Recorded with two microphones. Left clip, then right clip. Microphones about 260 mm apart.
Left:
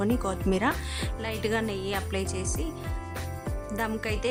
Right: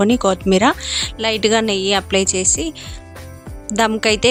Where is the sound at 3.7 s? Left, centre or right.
Right.